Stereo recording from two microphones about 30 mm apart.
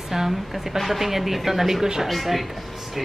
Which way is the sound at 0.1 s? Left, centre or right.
Centre.